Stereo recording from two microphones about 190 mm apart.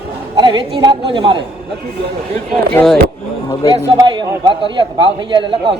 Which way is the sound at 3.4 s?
20° left (ahead or behind).